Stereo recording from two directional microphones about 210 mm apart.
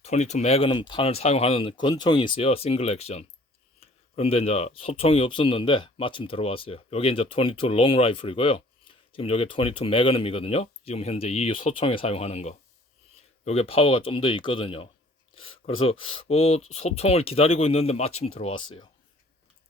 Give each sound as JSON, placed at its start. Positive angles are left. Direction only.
{"t": 0.0, "sound": "speech", "side_deg": 30}
{"t": 15.4, "sound": "a sound", "side_deg": 25}
{"t": 15.8, "sound": "speech", "side_deg": 25}